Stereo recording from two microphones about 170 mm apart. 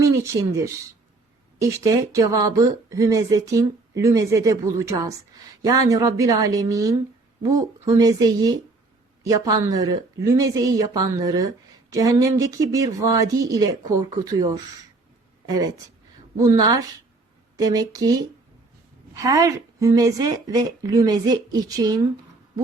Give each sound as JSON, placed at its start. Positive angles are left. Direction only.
{"t": 0.0, "sound": "speech", "side_deg": -20}